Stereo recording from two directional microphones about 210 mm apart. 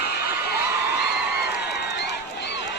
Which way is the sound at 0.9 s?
50° left (ahead or behind).